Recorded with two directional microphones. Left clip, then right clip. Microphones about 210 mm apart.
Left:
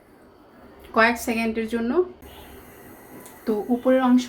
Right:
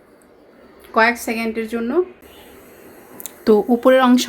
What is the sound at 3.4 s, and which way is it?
Speech, 55° right (ahead or behind).